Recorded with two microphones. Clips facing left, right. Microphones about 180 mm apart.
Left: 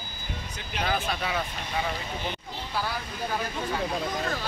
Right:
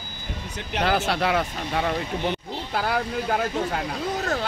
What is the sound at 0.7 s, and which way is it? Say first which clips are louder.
Speech: right 6 dB; 75° right (ahead or behind).